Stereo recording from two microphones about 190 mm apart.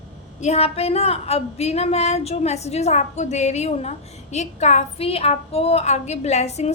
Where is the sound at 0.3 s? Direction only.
35° left (ahead or behind).